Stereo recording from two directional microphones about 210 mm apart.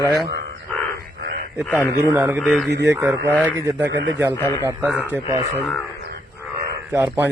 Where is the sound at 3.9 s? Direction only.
60° right (ahead or behind).